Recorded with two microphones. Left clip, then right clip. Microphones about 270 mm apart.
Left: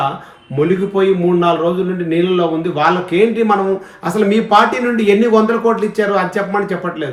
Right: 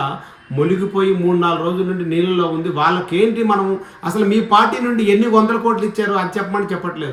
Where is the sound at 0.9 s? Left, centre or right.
Centre.